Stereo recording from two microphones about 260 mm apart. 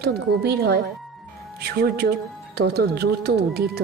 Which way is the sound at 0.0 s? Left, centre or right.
Right.